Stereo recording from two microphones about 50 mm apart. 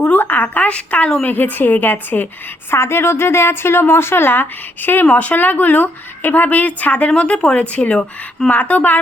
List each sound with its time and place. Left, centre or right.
0.2 s a sound: left
0.7 s speech: left
2.6 s a woman's voice: left
5.0 s speech: left